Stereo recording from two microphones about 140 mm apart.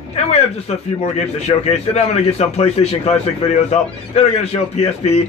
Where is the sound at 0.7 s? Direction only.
50° left (ahead or behind).